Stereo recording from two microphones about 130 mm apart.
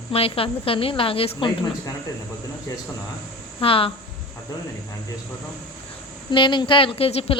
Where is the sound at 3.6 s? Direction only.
45° left (ahead or behind).